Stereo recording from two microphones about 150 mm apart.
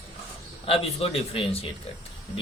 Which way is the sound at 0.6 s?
40° left (ahead or behind).